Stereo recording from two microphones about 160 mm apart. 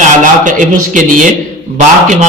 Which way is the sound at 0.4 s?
55° right (ahead or behind).